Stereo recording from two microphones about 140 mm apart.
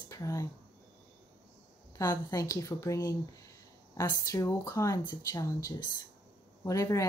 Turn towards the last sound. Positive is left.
turn(degrees=25)  # may be behind; listen again after turning